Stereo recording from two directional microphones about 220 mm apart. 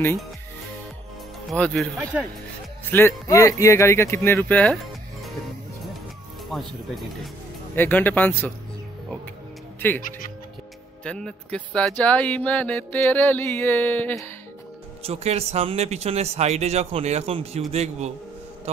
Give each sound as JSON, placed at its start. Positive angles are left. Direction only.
{"t": 1.5, "sound": "speech", "side_deg": 5}
{"t": 2.9, "sound": "mantra", "side_deg": 10}
{"t": 7.7, "sound": "mantra", "side_deg": 10}
{"t": 9.8, "sound": "speech", "side_deg": 10}
{"t": 10.0, "sound": "speech", "side_deg": 40}
{"t": 11.1, "sound": "speech", "side_deg": 5}
{"t": 12.0, "sound": "mantra", "side_deg": 5}
{"t": 15.0, "sound": "speech", "side_deg": -30}